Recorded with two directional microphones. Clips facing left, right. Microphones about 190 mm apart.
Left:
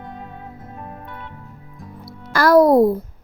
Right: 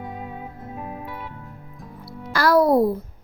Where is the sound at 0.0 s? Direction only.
5° right (ahead or behind).